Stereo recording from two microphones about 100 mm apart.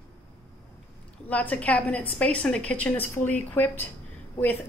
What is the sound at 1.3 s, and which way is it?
A woman's voice, 15° left (ahead or behind).